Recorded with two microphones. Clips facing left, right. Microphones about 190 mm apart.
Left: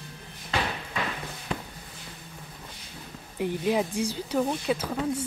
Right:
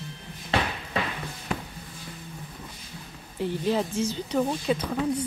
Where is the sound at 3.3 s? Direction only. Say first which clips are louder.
Even; 10° left (ahead or behind).